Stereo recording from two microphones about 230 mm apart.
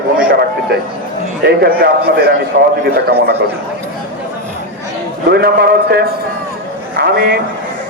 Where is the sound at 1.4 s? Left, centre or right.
Right.